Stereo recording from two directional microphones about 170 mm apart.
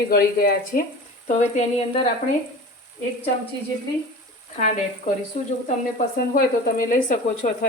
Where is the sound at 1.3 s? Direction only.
45° left (ahead or behind).